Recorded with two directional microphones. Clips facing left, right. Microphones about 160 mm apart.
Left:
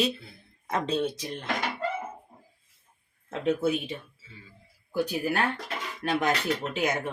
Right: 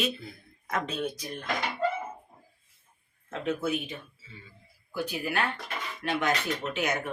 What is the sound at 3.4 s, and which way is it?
Speech, 30° left (ahead or behind).